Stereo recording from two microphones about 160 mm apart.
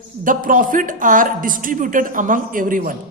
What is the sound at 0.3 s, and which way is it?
A man's voice, 60° right (ahead or behind).